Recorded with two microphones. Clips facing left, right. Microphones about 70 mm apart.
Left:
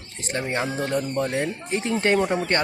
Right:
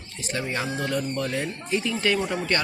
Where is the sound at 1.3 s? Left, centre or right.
Left.